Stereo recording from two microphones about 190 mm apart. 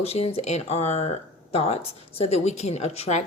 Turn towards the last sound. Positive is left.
turn(degrees=35)  # may be behind; listen again after turning